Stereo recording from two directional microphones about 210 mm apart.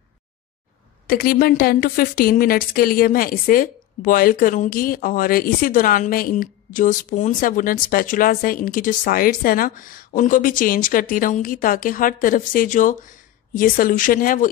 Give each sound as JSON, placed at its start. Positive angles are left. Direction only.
{"t": 1.0, "sound": "a woman's voice", "side_deg": 45}